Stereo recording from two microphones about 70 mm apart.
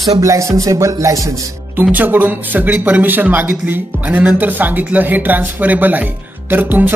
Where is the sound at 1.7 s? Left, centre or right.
Right.